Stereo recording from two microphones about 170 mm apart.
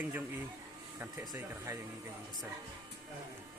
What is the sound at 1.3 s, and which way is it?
Speech, 15° right (ahead or behind).